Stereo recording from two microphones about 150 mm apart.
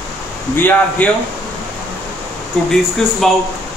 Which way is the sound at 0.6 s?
10° left (ahead or behind).